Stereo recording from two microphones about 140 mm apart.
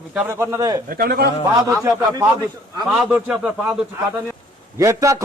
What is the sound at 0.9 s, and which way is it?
Speech, 90° right.